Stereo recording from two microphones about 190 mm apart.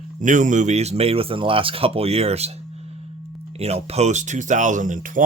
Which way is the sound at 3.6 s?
35° right (ahead or behind).